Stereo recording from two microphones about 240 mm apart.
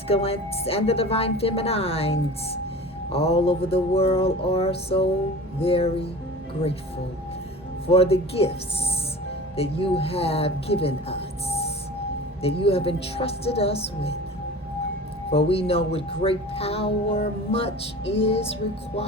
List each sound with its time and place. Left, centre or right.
0.1 s a woman's voice: left
7.9 s a woman's voice: left
15.3 s a woman's voice: left